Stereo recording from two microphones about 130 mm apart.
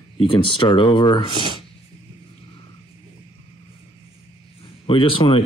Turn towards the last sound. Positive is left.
turn(degrees=45)  # may be behind; listen again after turning